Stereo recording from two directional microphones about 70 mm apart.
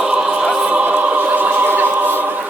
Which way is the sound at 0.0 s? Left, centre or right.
Centre.